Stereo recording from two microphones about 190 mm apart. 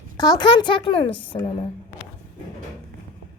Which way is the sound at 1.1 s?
10° left (ahead or behind).